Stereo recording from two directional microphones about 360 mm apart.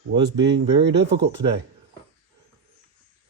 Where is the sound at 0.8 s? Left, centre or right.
Right.